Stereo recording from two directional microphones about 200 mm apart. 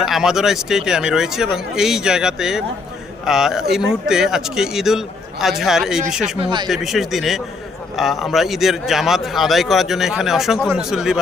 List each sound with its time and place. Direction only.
0.0 s a man's voice: centre (ahead or behind)
6.4 s speech: 25° right (ahead or behind)
6.7 s a man's voice: centre (ahead or behind)